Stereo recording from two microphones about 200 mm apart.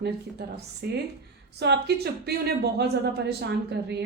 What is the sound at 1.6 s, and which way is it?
A woman's voice, 55° right (ahead or behind).